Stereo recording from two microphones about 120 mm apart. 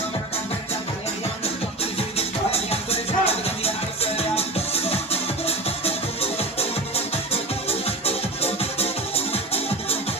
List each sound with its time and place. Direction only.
1.8 s music: 55° left (ahead or behind)